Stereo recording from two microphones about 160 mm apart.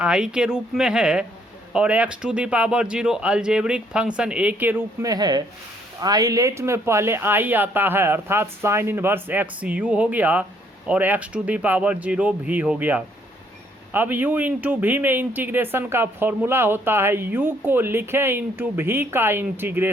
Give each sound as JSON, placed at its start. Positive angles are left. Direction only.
{"t": 0.0, "sound": "speech", "side_deg": -5}
{"t": 5.0, "sound": "speech", "side_deg": -25}